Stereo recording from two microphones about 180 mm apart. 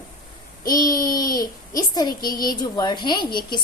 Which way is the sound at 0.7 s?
20° left (ahead or behind).